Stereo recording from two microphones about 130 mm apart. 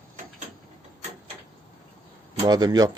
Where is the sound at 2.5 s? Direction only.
30° right (ahead or behind).